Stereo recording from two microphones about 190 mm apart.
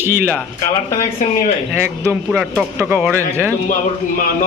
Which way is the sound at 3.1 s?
10° left (ahead or behind).